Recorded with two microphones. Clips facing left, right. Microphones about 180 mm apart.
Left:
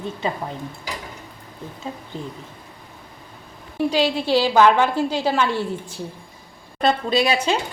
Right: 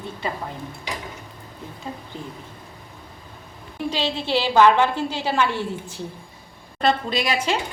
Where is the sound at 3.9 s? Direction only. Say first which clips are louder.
Left 5 dB; 10° left (ahead or behind).